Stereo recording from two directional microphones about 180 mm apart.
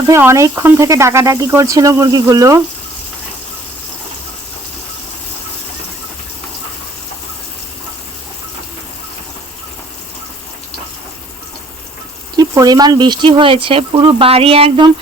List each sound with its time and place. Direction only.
0.1 s speech: 15° right (ahead or behind)
12.4 s speech: 20° right (ahead or behind)